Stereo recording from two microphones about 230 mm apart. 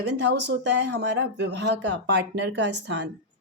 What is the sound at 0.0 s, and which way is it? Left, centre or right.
A woman's voice, right.